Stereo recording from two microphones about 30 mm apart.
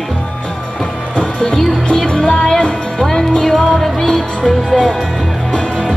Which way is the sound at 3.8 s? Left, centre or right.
Centre.